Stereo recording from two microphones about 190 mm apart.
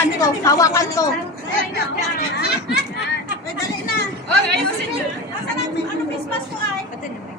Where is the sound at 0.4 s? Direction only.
15° left (ahead or behind).